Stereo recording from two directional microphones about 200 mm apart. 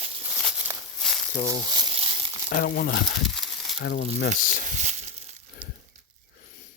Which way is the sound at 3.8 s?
55° left (ahead or behind).